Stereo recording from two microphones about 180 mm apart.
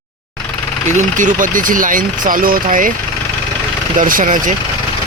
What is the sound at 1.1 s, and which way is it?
Speech, 45° right (ahead or behind).